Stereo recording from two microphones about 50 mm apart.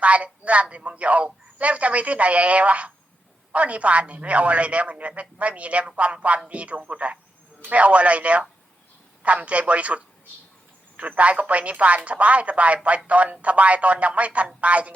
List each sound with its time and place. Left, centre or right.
0.0 s a woman's voice: right